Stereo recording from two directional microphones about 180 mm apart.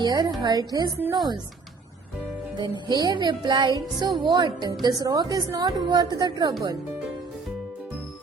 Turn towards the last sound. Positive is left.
turn(degrees=-25)  # may be behind; listen again after turning